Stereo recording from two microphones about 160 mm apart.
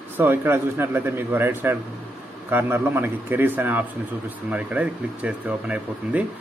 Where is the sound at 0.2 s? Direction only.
15° right (ahead or behind).